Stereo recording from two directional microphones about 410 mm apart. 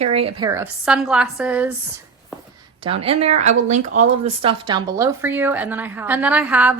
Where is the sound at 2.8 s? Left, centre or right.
Centre.